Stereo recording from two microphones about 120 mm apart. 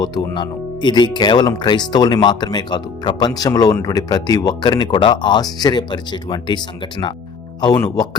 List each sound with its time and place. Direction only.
0.0 s speech: 35° left (ahead or behind)
7.6 s speech: 35° left (ahead or behind)